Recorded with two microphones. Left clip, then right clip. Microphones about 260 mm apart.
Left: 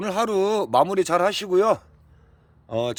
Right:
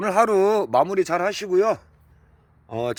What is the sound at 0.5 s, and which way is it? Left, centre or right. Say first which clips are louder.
Speech: even; centre.